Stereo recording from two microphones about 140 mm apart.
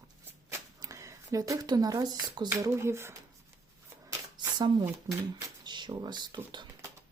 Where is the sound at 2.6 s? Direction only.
20° right (ahead or behind).